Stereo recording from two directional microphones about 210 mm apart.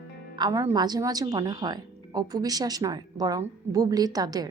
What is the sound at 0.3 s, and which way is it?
A woman's voice, 20° right (ahead or behind).